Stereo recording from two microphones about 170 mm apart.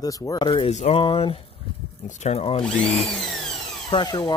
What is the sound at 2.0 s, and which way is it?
Speech, 45° left (ahead or behind).